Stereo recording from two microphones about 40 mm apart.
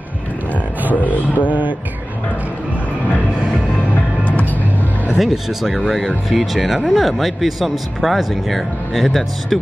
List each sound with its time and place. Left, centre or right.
0.9 s a sound: left
1.5 s speech: right
4.2 s music: left
5.1 s speech: centre